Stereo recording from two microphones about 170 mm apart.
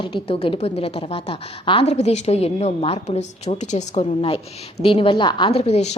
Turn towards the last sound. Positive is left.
turn(degrees=40)  # may be behind; listen again after turning